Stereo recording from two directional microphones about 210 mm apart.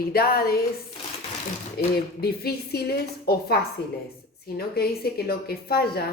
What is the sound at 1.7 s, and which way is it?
A woman's voice, 50° left (ahead or behind).